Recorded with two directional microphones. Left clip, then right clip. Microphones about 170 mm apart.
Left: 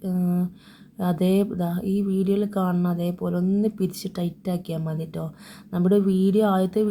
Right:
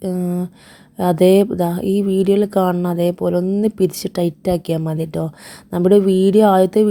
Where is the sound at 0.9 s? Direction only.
45° right (ahead or behind).